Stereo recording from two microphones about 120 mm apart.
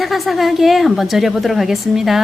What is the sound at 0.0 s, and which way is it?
Speech, centre (ahead or behind).